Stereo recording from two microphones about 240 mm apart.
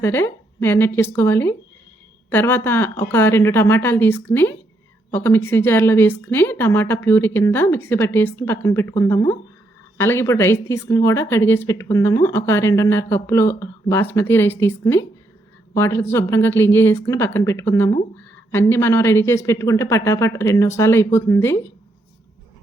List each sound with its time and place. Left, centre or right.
0.0 s a woman's voice: centre